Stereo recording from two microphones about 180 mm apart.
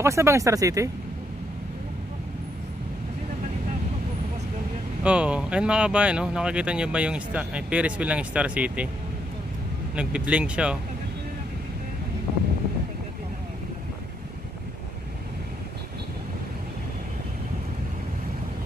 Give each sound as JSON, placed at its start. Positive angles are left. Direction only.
{"t": 0.0, "sound": "speech", "side_deg": -15}
{"t": 5.0, "sound": "speech", "side_deg": -5}
{"t": 9.9, "sound": "speech", "side_deg": -5}